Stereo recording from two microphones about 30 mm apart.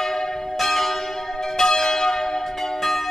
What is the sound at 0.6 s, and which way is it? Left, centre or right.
Church bell, centre.